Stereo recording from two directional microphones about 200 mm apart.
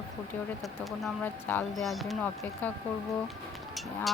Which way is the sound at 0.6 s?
Centre (ahead or behind).